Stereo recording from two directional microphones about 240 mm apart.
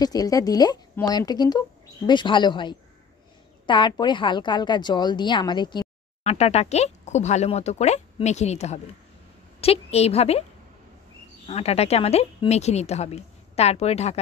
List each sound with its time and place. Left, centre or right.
0.0 s a woman's voice: centre
11.4 s a woman's voice: left